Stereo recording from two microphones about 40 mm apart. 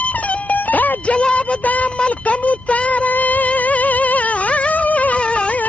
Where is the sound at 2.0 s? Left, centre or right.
Left.